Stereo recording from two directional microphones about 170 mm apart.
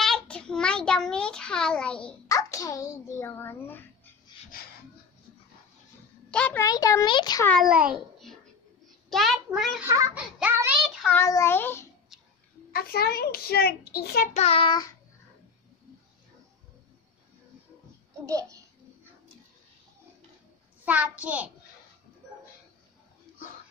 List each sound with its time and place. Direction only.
0.0 s a sound: 5° left (ahead or behind)
2.2 s a child's voice: 20° left (ahead or behind)
6.3 s a child's voice: 5° left (ahead or behind)
6.6 s a child's voice: 20° left (ahead or behind)
7.9 s babbling: centre (ahead or behind)
9.1 s a child's voice: centre (ahead or behind)
9.8 s a child's voice: 20° right (ahead or behind)
10.1 s child singing: 10° right (ahead or behind)
11.1 s a child's voice: 15° left (ahead or behind)
12.7 s a child's voice: 65° left (ahead or behind)
14.3 s child singing: 35° left (ahead or behind)
18.2 s a child's voice: 20° right (ahead or behind)
20.8 s a child's voice: 10° right (ahead or behind)